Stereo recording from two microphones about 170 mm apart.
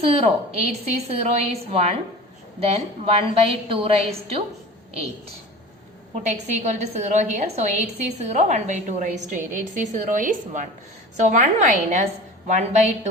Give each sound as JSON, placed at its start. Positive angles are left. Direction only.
{"t": 0.0, "sound": "a woman's voice", "side_deg": -35}
{"t": 6.1, "sound": "a woman's voice", "side_deg": -45}